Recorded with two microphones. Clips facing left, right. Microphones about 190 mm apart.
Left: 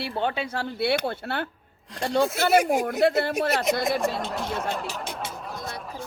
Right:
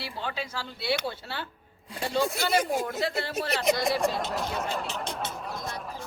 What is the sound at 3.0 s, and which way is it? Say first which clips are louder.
Speech: left 10 dB; 55° left (ahead or behind).